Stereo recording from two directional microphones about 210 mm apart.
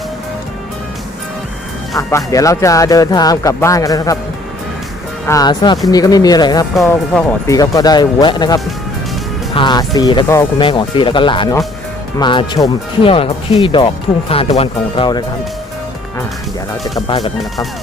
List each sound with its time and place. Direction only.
2.0 s speech: 15° left (ahead or behind)
5.2 s speech: 15° left (ahead or behind)
6.8 s speech: 5° left (ahead or behind); by 15.2 s 25° left (ahead or behind)
17.1 s speech: 25° left (ahead or behind)